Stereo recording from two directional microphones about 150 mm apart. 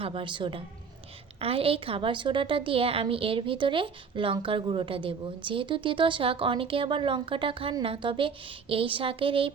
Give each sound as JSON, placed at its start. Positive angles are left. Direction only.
{"t": 0.0, "sound": "a woman's voice", "side_deg": -35}